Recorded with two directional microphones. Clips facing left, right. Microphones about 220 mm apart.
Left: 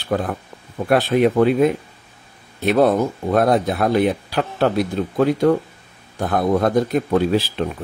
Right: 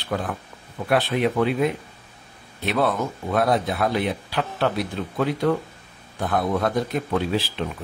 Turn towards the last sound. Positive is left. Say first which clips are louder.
# left 6 dB
turn(degrees=45)  # may be behind; listen again after turning